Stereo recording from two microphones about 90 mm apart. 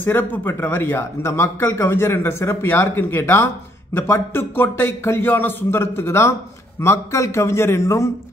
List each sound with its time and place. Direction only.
0.0 s a man's voice: 20° left (ahead or behind)